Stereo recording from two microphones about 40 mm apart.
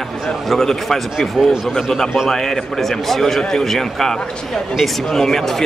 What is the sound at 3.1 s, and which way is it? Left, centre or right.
Speech, centre.